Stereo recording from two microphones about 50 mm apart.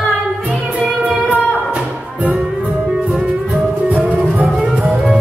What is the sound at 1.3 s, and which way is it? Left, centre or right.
Music, right.